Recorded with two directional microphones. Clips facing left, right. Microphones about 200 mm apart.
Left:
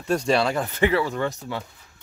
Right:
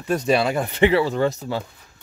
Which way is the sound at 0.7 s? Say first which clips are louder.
Right 6 dB; 25° right (ahead or behind).